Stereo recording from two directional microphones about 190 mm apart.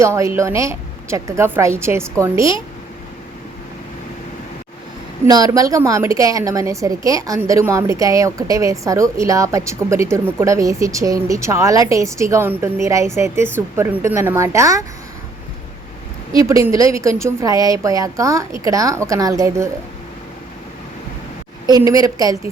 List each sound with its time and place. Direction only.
0.0 s a woman's voice: 15° right (ahead or behind)
5.2 s a woman's voice: 20° right (ahead or behind)
16.3 s a woman's voice: 15° right (ahead or behind)
21.7 s a woman's voice: 20° right (ahead or behind)